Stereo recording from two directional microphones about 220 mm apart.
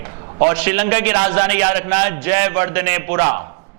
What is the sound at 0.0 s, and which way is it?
A man's voice, 10° right (ahead or behind).